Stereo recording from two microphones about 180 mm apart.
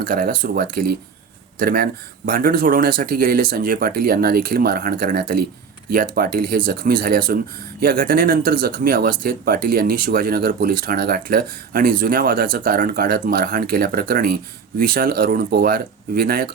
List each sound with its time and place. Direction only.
0.0 s speech: 55° right (ahead or behind)